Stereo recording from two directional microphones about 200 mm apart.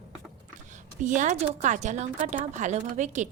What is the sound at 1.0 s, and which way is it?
A woman's voice, 40° right (ahead or behind).